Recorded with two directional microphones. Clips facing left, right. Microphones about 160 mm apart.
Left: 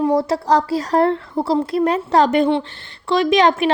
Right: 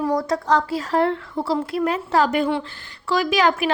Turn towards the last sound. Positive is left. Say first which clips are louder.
# left 4 dB
turn(degrees=30)  # may be behind; listen again after turning